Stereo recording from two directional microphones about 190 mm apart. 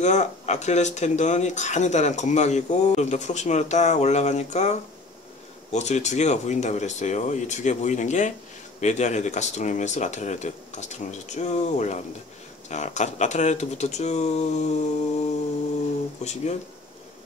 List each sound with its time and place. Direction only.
0.0 s speech: 40° left (ahead or behind)
16.2 s speech: 35° left (ahead or behind)